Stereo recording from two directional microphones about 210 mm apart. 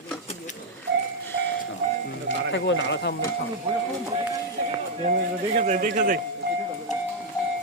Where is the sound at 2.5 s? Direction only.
55° left (ahead or behind).